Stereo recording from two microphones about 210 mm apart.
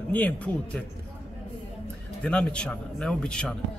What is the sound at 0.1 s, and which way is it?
Speech, 5° left (ahead or behind).